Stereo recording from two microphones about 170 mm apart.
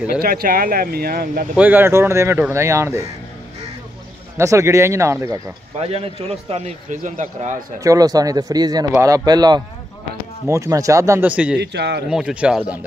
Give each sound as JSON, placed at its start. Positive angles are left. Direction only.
{"t": 0.2, "sound": "speech", "side_deg": -60}
{"t": 1.6, "sound": "speech", "side_deg": -10}
{"t": 4.4, "sound": "speech", "side_deg": -15}
{"t": 5.8, "sound": "a man's voice", "side_deg": -35}
{"t": 7.8, "sound": "speech", "side_deg": -20}
{"t": 11.6, "sound": "a man's voice", "side_deg": -80}
{"t": 12.1, "sound": "speech", "side_deg": -5}